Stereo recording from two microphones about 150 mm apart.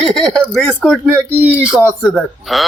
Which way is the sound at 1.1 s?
10° right (ahead or behind).